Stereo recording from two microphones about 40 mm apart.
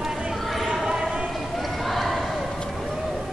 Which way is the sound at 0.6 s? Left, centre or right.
Centre.